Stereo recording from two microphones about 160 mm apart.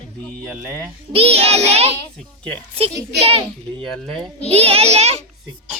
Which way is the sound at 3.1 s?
40° right (ahead or behind).